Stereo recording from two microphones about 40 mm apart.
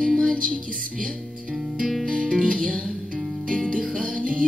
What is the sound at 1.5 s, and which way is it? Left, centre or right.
Music, centre.